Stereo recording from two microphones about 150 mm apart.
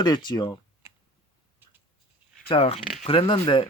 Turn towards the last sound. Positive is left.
turn(degrees=35)  # may be behind; listen again after turning